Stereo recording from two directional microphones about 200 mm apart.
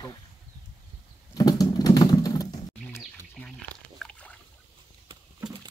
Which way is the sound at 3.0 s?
5° left (ahead or behind).